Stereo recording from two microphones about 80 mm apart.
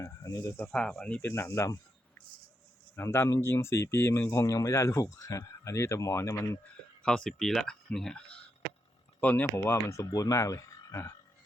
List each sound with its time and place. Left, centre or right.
0.0 s speech: left
0.7 s speech: centre
1.3 s speech: left
2.9 s a man's voice: left
4.4 s speech: left
6.3 s speech: left
7.0 s speech: centre
9.2 s speech: centre
9.6 s speech: left